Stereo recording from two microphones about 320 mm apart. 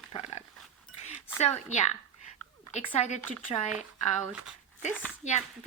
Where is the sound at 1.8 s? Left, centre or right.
Left.